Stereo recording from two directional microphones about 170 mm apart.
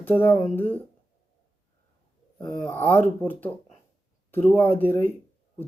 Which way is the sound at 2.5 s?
15° left (ahead or behind).